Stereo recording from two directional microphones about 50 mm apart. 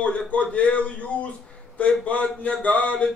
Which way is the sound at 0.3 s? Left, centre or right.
Left.